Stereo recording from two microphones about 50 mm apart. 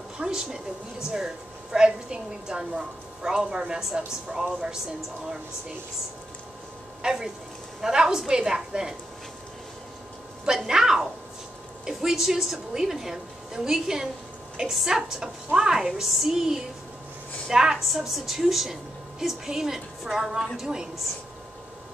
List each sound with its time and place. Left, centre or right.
0.2 s speech: centre
7.0 s speech: centre
10.7 s a woman's voice: centre